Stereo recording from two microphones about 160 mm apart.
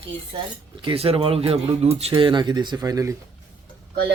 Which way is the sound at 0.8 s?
35° right (ahead or behind).